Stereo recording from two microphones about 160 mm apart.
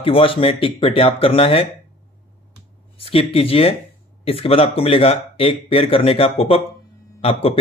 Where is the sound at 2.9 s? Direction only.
35° left (ahead or behind).